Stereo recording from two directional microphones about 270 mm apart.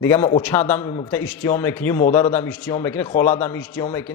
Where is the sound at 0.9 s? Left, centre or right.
Centre.